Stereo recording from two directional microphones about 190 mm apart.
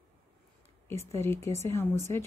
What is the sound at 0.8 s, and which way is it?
Speech, 15° left (ahead or behind).